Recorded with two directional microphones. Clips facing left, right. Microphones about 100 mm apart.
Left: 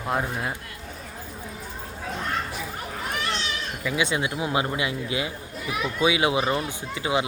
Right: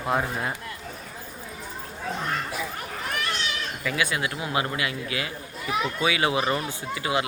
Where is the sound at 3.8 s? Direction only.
15° left (ahead or behind).